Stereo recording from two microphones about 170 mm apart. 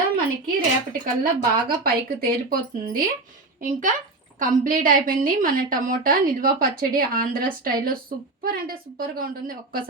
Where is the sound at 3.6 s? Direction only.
50° right (ahead or behind).